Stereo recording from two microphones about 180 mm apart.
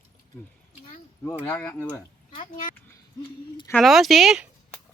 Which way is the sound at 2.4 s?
50° left (ahead or behind).